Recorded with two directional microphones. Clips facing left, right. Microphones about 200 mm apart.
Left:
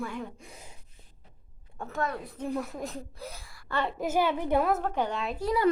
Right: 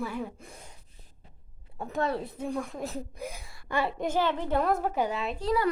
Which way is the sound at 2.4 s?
5° left (ahead or behind).